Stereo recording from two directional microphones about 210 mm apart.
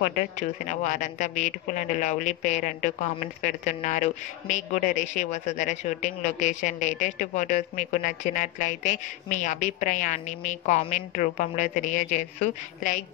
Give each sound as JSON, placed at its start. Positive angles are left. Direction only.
{"t": 0.0, "sound": "a man's voice", "side_deg": 35}